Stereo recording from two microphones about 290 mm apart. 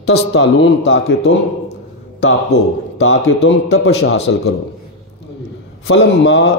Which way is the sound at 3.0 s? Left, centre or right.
Left.